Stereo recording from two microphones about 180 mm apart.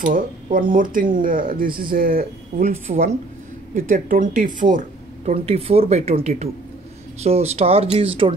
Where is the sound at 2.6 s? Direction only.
40° right (ahead or behind).